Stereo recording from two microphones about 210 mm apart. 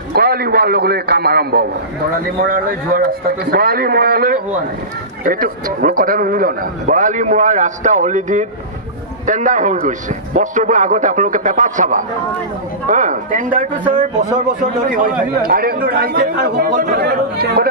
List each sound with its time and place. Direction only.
0.1 s a man's voice: 45° right (ahead or behind)
14.9 s a man's voice: 40° right (ahead or behind)